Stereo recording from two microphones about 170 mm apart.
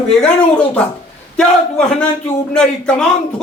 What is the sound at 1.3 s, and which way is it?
A man's voice, 5° left (ahead or behind).